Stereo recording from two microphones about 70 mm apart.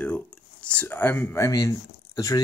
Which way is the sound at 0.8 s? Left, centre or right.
Left.